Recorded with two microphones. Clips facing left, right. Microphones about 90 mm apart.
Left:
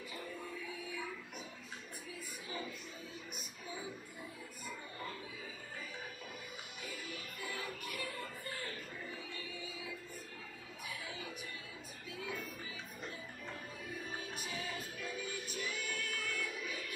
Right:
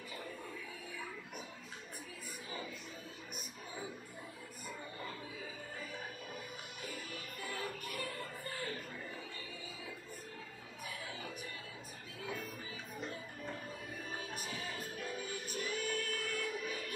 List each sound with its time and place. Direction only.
7.8 s music: 40° right (ahead or behind)
15.0 s music: 40° right (ahead or behind)